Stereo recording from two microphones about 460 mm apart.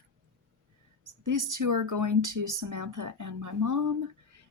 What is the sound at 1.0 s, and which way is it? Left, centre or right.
Speech, right.